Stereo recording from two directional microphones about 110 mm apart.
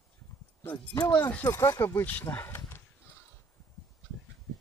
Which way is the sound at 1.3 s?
20° left (ahead or behind).